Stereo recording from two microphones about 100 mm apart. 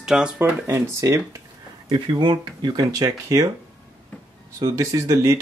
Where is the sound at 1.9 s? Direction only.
50° right (ahead or behind).